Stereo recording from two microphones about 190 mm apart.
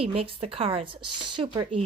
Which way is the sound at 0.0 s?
30° right (ahead or behind).